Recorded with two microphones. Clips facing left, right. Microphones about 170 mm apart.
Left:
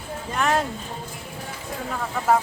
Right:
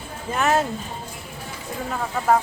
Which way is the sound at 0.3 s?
5° right (ahead or behind).